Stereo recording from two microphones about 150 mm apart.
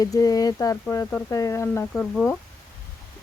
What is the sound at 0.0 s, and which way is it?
Speech, 25° left (ahead or behind).